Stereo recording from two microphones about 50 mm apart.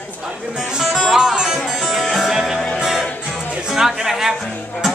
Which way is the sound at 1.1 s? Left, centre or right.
Centre.